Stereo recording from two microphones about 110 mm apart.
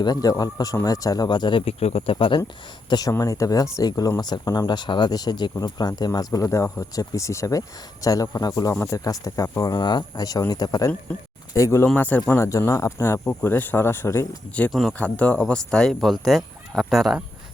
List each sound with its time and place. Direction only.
0.0 s speech: 35° left (ahead or behind)
1.8 s speech: 65° left (ahead or behind)
3.1 s speech: 30° left (ahead or behind)
11.9 s speech: 15° left (ahead or behind)
12.3 s speech: 25° left (ahead or behind)
14.7 s speech: centre (ahead or behind)
14.9 s speech: 15° left (ahead or behind); by 17.2 s centre (ahead or behind)